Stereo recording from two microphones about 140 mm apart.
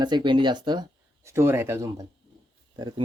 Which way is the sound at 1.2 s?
20° right (ahead or behind).